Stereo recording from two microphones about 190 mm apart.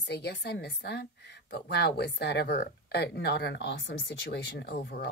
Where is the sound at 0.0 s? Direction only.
65° left (ahead or behind).